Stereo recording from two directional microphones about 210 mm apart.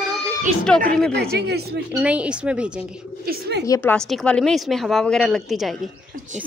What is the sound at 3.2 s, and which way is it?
Speech, 50° right (ahead or behind).